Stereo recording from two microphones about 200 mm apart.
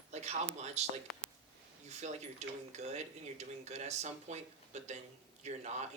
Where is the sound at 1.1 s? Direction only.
Centre (ahead or behind).